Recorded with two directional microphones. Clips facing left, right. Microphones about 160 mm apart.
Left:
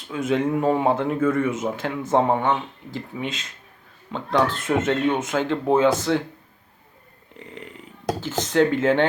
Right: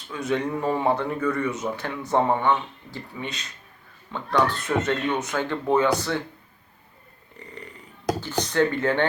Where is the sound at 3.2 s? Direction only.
90° left.